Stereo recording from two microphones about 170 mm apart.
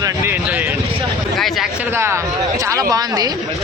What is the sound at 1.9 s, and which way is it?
Speech, 15° right (ahead or behind).